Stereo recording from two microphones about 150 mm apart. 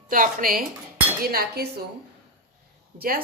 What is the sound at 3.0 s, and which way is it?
Speech, 80° right.